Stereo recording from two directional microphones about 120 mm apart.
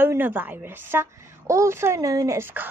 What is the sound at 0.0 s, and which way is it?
Speech, 15° right (ahead or behind).